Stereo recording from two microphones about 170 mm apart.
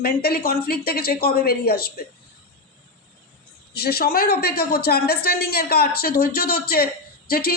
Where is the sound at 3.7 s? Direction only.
65° left (ahead or behind).